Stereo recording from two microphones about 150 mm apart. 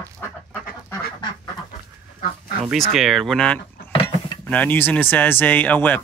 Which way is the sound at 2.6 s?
Centre (ahead or behind).